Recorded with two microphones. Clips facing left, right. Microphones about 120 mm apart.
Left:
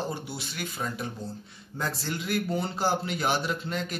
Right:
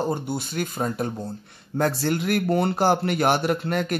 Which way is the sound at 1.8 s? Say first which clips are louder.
Right 10 dB; 60° right (ahead or behind).